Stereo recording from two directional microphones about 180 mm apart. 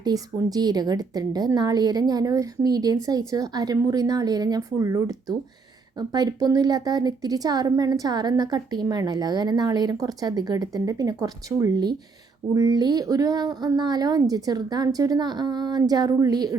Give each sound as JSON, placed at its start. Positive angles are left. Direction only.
{"t": 0.0, "sound": "a woman's voice", "side_deg": -20}